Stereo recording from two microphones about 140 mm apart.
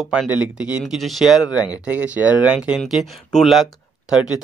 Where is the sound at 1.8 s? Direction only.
10° right (ahead or behind).